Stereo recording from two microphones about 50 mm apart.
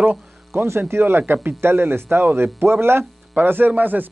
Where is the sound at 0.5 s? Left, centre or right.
Right.